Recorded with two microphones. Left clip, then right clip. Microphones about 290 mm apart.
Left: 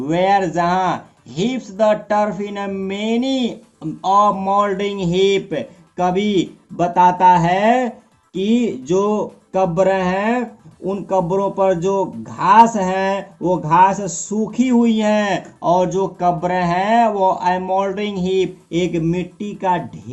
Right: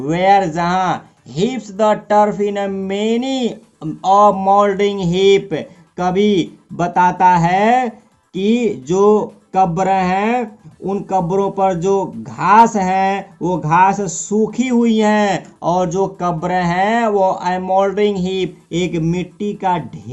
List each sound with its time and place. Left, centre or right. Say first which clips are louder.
0.1 s speech: right 3 dB; right